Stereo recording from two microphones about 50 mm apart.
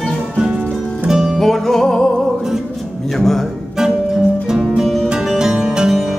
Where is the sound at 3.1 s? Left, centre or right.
Centre.